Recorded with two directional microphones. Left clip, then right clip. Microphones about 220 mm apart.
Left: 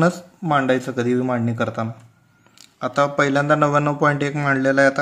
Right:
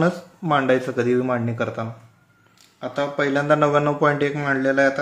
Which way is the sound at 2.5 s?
35° left (ahead or behind).